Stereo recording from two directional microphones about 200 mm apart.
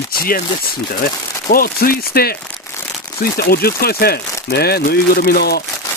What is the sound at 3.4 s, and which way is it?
Speech, 50° left (ahead or behind).